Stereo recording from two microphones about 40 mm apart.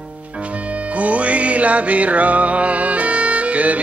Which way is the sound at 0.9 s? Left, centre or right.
Right.